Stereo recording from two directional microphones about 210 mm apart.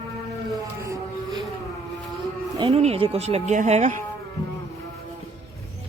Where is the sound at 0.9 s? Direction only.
15° right (ahead or behind).